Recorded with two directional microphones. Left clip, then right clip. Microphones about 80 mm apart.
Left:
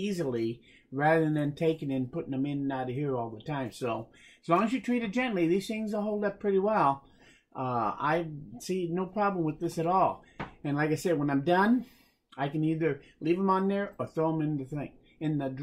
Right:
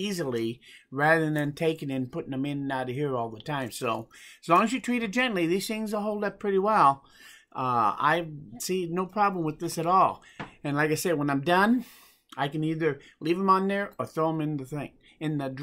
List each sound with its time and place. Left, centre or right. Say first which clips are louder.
0.0 s speech: right 2 dB; right